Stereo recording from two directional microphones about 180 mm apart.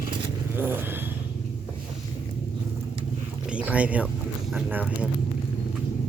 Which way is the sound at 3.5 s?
5° right (ahead or behind).